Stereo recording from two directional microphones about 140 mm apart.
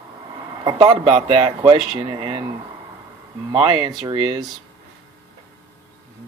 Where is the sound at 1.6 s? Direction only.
30° right (ahead or behind).